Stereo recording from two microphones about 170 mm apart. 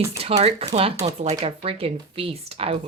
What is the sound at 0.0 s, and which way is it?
Speech, 35° right (ahead or behind).